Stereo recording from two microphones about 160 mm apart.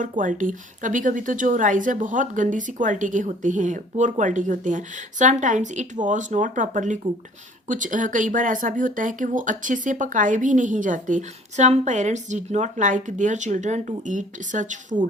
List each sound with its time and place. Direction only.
0.0 s speech: 55° right (ahead or behind)